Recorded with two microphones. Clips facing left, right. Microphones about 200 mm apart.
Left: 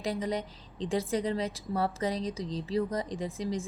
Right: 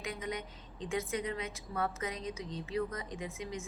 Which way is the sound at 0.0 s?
35° left (ahead or behind).